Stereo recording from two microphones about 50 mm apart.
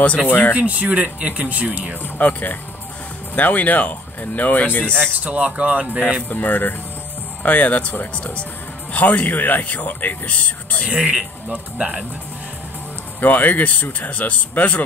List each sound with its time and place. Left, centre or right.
0.3 s speech: left
0.6 s speech: right
2.1 s speech: left
5.2 s speech: right
6.2 s speech: left
10.9 s speech: centre
13.2 s speech: left